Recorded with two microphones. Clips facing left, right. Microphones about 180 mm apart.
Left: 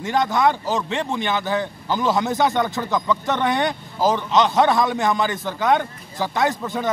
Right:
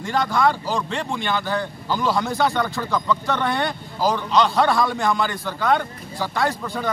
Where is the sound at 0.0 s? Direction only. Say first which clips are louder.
Left 1 dB; 20° left (ahead or behind).